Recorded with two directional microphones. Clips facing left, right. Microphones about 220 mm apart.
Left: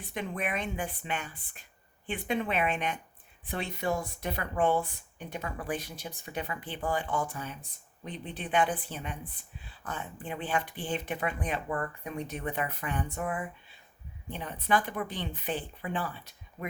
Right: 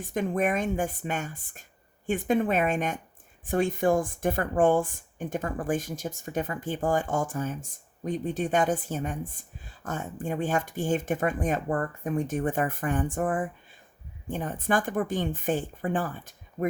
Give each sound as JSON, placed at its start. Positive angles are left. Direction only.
{"t": 0.0, "sound": "speech", "side_deg": -45}